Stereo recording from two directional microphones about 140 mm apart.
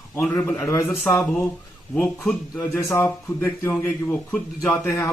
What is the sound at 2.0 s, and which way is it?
A man's voice, 10° left (ahead or behind).